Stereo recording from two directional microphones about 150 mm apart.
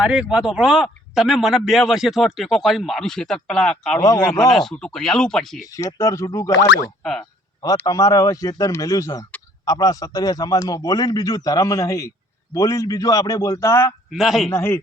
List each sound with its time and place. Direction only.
0.0 s speech: 5° right (ahead or behind)
4.0 s a man's voice: 25° left (ahead or behind)
4.5 s speech: 5° left (ahead or behind)
5.6 s a man's voice: 20° left (ahead or behind)
7.0 s speech: 5° left (ahead or behind)
7.9 s a man's voice: 25° left (ahead or behind)
14.1 s speech: centre (ahead or behind)
14.5 s speech: 15° left (ahead or behind)